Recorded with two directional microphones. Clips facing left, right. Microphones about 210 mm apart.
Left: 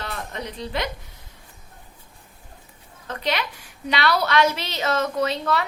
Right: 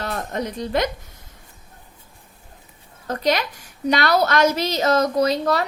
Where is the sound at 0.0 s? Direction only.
45° right (ahead or behind).